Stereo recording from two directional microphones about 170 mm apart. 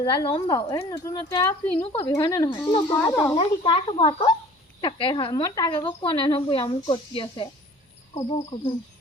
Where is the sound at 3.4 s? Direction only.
30° left (ahead or behind).